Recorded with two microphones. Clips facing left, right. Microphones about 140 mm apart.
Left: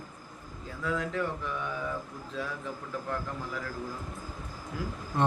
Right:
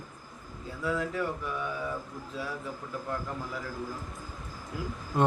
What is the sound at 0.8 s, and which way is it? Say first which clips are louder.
Speech: right 1 dB; 10° right (ahead or behind).